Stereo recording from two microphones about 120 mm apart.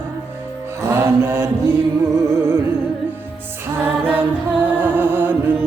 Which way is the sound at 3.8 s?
15° right (ahead or behind).